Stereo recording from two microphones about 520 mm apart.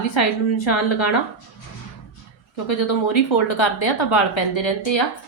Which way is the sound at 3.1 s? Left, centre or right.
Left.